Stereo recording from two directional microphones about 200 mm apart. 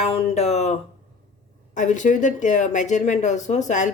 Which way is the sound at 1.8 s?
40° left (ahead or behind).